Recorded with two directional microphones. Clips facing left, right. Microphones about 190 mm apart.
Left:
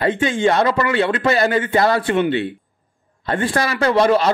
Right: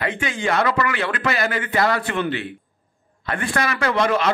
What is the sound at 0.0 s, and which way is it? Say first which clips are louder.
A man's voice: left 7 dB; 30° left (ahead or behind).